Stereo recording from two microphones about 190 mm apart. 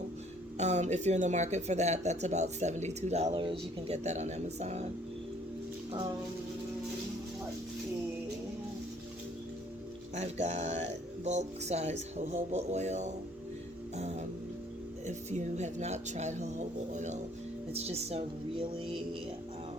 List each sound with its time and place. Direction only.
0.5 s speech: 35° right (ahead or behind)
10.2 s speech: 35° right (ahead or behind)